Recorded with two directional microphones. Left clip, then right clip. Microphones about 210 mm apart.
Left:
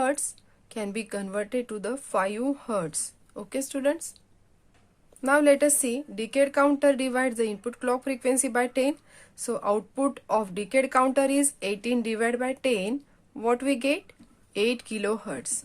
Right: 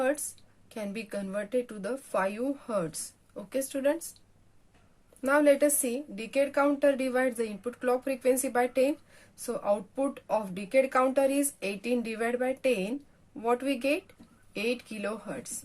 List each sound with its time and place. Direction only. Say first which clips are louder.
0.0 s a woman's voice: left 2 dB; 30° left (ahead or behind)
5.2 s a woman's voice: left 3 dB; 25° left (ahead or behind)